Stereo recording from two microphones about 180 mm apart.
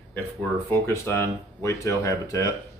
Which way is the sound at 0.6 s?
15° left (ahead or behind).